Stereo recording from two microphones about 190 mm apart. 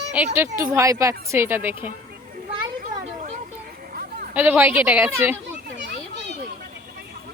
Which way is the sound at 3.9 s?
50° right (ahead or behind).